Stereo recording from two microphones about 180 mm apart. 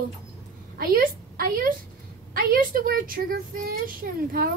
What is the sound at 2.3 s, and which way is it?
Speech, 55° right (ahead or behind).